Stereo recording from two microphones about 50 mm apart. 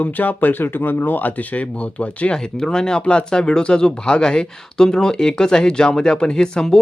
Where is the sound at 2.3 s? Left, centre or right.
Centre.